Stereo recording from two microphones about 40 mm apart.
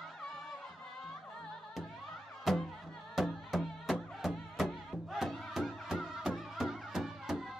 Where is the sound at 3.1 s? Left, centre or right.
Centre.